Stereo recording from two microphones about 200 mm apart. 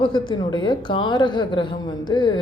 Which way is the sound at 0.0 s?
25° left (ahead or behind).